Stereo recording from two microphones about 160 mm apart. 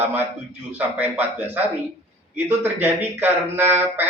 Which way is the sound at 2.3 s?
15° right (ahead or behind).